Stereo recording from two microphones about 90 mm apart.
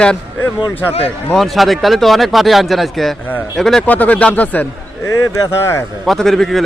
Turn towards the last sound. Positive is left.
turn(degrees=5)  # may be behind; listen again after turning